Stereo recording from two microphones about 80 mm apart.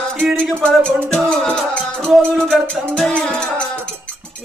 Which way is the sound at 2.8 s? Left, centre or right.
Centre.